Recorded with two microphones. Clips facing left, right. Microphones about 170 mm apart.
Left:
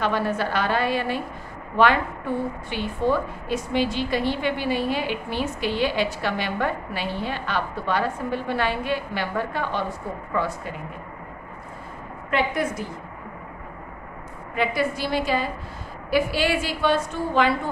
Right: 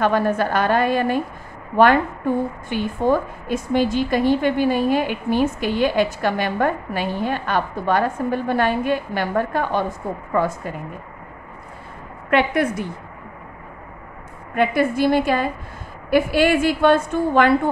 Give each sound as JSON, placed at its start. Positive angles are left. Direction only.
{"t": 0.0, "sound": "a woman's voice", "side_deg": -50}
{"t": 12.3, "sound": "a woman's voice", "side_deg": -65}
{"t": 14.5, "sound": "a woman's voice", "side_deg": -55}